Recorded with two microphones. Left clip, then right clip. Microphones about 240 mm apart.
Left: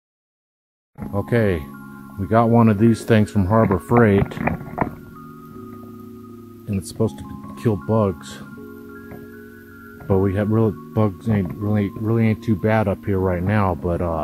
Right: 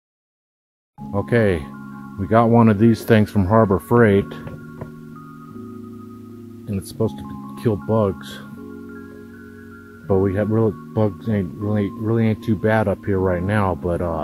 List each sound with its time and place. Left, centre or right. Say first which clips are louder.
1.1 s speech: right 2 dB; centre
3.9 s speech: even; centre
6.7 s speech: even; left
10.0 s speech: right 1 dB; left